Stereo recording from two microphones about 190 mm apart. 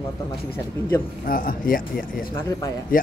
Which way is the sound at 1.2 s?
50° left (ahead or behind).